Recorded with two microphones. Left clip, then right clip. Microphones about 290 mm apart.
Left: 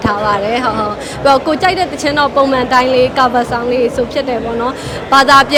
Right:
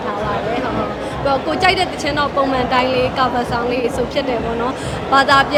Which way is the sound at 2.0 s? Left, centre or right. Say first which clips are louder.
Left 8 dB; left.